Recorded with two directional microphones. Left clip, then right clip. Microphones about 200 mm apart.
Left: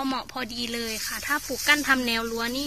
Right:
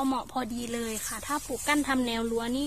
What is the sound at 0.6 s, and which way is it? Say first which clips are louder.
Speech: left 4 dB; 20° right (ahead or behind).